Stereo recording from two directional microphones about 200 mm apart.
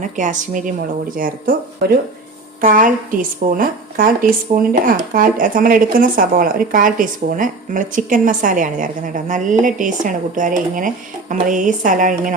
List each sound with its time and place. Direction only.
0.0 s speech: 40° right (ahead or behind)
2.6 s speech: 45° right (ahead or behind)